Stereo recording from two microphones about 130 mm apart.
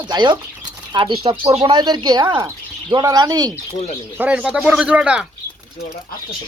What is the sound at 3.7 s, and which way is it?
Speech, 60° left (ahead or behind).